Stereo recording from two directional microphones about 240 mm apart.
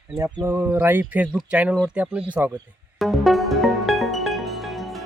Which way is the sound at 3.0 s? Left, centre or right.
Centre.